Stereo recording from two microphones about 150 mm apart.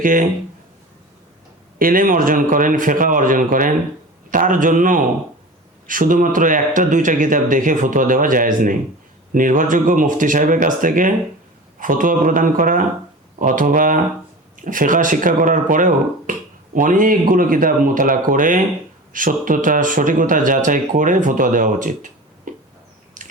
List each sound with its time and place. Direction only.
0.0 s speech: 65° right (ahead or behind)
1.8 s speech: 70° right (ahead or behind)
23.2 s mechanisms: 60° right (ahead or behind)